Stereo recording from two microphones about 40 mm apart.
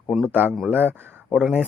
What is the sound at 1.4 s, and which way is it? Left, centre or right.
Speech, centre.